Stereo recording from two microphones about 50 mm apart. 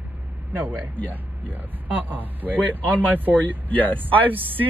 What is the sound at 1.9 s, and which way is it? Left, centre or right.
Speech, right.